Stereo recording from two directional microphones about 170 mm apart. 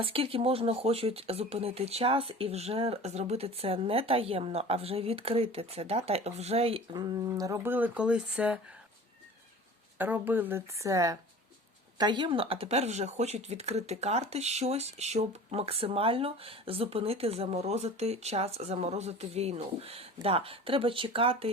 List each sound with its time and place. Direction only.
0.0 s speech: 30° right (ahead or behind); by 8.5 s 5° right (ahead or behind)
10.0 s a woman's voice: 10° right (ahead or behind); by 21.5 s 35° right (ahead or behind)